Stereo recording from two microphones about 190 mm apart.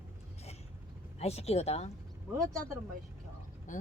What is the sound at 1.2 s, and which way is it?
Speech, 35° left (ahead or behind).